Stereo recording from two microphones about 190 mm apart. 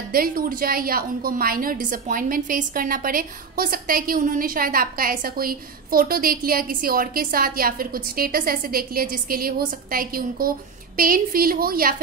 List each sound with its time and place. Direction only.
0.1 s a woman's voice: 50° right (ahead or behind)